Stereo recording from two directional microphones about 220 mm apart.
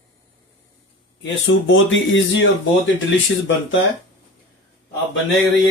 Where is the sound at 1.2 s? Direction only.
55° left (ahead or behind).